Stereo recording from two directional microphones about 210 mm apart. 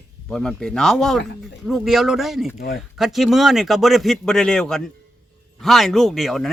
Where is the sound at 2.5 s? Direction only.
45° left (ahead or behind).